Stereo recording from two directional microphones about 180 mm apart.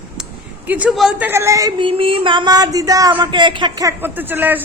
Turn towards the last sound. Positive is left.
turn(degrees=-10)  # may be behind; listen again after turning